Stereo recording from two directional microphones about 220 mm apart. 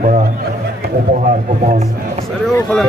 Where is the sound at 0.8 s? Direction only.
35° right (ahead or behind).